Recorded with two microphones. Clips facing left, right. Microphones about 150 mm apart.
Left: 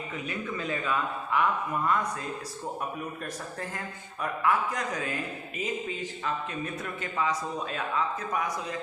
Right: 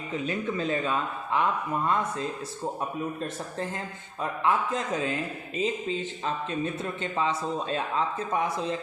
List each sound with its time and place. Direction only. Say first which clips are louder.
0.1 s speech: right 7 dB; 25° right (ahead or behind)
4.2 s speech: right 1 dB; 25° right (ahead or behind)